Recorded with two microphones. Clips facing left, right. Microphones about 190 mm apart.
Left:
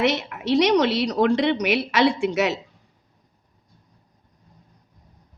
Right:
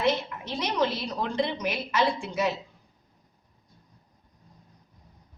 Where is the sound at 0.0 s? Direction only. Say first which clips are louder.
Left 4 dB; 80° left.